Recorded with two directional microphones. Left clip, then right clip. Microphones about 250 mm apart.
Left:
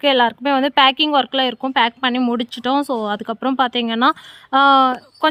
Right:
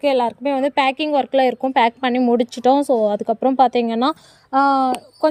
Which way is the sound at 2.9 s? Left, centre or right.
Left.